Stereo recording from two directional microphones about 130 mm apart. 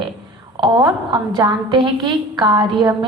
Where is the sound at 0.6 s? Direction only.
35° right (ahead or behind).